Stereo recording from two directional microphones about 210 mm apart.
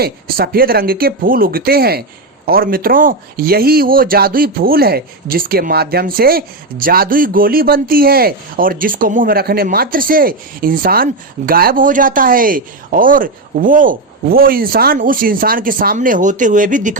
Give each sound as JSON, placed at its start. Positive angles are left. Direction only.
{"t": 0.0, "sound": "speech", "side_deg": -45}